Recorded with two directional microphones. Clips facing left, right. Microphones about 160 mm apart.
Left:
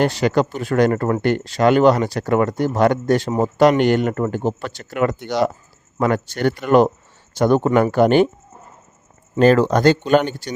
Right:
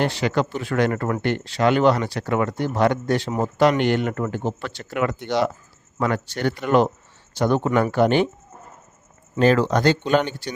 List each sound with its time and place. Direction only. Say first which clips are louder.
0.0 s speech: left 4 dB; 40° left (ahead or behind)
9.4 s speech: left 4 dB; 45° left (ahead or behind)